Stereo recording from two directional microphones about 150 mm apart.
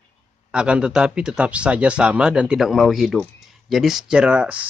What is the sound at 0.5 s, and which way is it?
Speech, 5° right (ahead or behind).